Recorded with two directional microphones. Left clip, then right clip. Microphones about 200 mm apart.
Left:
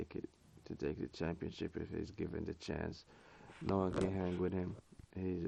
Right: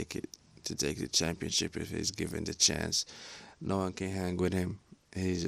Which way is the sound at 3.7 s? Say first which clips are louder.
Right 2 dB; 20° right (ahead or behind).